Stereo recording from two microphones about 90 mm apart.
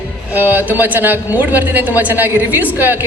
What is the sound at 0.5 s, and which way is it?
A woman's voice, 20° right (ahead or behind).